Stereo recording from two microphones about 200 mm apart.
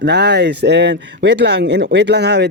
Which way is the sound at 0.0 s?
55° right (ahead or behind).